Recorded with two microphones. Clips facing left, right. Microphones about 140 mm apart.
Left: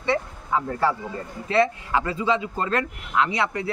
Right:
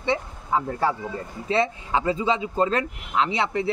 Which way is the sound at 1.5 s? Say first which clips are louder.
Left 2 dB; 25° right (ahead or behind).